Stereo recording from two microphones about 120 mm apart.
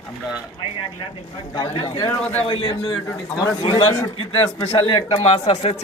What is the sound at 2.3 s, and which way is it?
A man's voice, 50° left (ahead or behind).